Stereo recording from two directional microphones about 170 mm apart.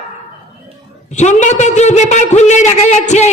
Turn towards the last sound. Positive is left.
turn(degrees=40)  # may be behind; listen again after turning